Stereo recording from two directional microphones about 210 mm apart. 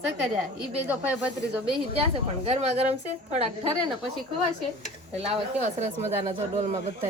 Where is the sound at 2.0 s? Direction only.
30° right (ahead or behind).